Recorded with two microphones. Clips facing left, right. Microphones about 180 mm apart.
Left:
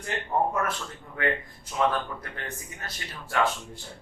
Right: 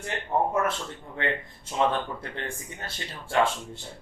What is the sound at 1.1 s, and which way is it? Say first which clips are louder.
Speech: left 2 dB; 25° right (ahead or behind).